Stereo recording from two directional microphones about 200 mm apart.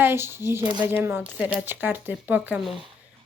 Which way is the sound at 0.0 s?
10° right (ahead or behind).